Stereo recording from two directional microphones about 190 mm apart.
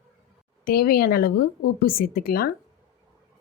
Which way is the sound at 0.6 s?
50° left (ahead or behind).